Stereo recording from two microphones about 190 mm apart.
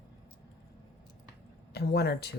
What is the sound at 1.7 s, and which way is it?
Speech, 60° left (ahead or behind).